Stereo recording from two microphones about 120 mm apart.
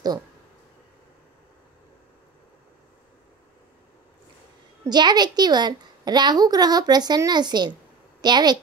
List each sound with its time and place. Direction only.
4.8 s a woman's voice: 35° right (ahead or behind)